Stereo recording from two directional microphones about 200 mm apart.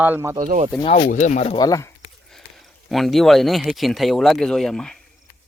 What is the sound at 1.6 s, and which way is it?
Speech, 15° left (ahead or behind).